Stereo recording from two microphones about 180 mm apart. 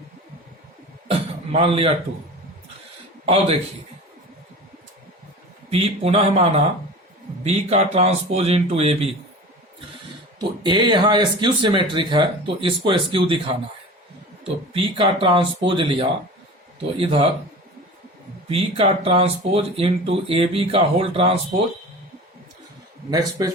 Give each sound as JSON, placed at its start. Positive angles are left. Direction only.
{"t": 1.0, "sound": "throat clearing", "side_deg": -30}
{"t": 3.2, "sound": "speech", "side_deg": -35}
{"t": 5.7, "sound": "speech", "side_deg": -35}
{"t": 10.6, "sound": "speech", "side_deg": -25}
{"t": 18.4, "sound": "speech", "side_deg": -30}